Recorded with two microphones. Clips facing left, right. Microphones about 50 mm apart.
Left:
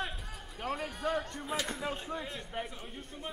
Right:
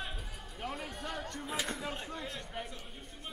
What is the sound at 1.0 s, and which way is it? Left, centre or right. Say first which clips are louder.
Music: left 10 dB; centre.